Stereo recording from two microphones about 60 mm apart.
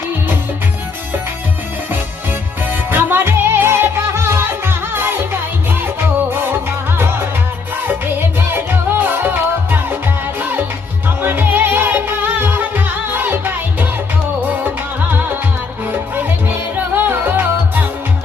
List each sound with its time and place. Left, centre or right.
2.6 s music: right
8.4 s music: right
15.9 s music: right